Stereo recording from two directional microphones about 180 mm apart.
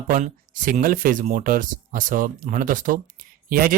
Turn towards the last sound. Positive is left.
turn(degrees=-50)  # may be behind; listen again after turning